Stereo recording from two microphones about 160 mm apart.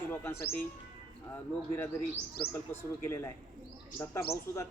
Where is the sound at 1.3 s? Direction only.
15° left (ahead or behind).